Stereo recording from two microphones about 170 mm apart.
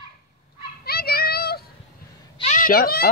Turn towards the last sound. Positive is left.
turn(degrees=65)  # may be behind; listen again after turning